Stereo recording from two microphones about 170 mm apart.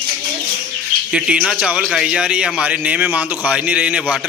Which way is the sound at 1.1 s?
5° right (ahead or behind).